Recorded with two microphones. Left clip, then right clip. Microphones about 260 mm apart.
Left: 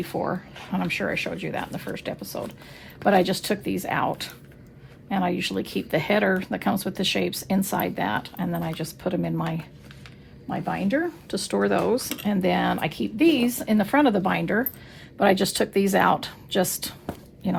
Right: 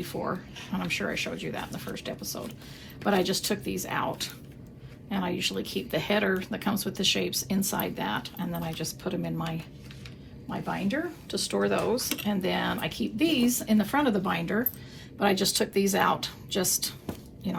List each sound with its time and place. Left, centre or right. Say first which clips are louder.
0.0 s speech: left 5 dB; left